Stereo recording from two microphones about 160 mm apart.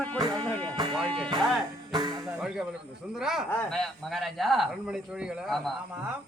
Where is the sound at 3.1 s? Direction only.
Centre (ahead or behind).